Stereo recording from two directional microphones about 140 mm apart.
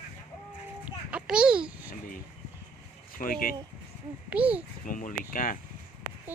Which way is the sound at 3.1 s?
90° left.